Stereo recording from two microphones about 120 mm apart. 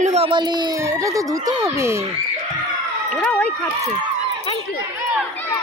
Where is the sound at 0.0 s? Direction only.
65° right (ahead or behind).